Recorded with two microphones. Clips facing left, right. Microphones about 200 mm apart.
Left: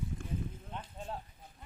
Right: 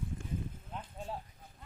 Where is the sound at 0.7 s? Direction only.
5° right (ahead or behind).